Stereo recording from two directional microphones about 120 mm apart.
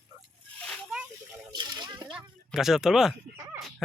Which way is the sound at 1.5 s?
35° right (ahead or behind).